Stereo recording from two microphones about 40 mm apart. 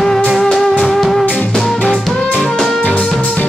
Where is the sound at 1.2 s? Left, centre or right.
Left.